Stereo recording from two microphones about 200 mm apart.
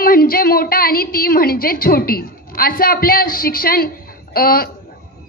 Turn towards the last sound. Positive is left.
turn(degrees=50)  # may be behind; listen again after turning